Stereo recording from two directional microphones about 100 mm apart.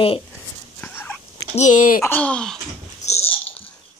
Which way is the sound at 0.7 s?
20° left (ahead or behind).